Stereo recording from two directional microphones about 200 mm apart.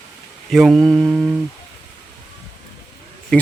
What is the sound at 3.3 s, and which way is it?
Speech, 5° left (ahead or behind).